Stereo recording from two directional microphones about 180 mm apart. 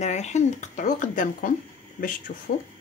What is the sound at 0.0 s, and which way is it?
Speech, 40° left (ahead or behind).